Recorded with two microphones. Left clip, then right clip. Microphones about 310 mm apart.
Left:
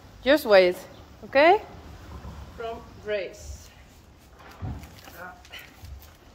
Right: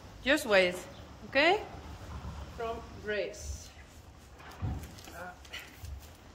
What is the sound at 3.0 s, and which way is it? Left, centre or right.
Speech, centre.